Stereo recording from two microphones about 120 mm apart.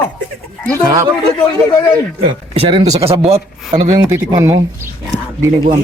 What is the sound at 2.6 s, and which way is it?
Speech, 55° right (ahead or behind).